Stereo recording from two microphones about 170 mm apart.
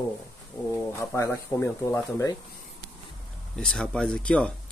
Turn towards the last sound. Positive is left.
turn(degrees=5)  # may be behind; listen again after turning